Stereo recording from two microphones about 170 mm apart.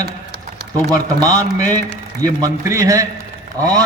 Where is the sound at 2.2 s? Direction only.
20° right (ahead or behind).